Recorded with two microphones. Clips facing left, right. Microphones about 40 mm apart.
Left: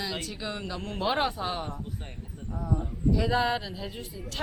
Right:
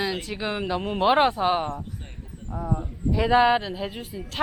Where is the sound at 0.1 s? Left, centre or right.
Centre.